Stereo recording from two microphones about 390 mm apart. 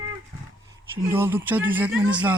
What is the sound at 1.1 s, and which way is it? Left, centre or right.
A man's voice, centre.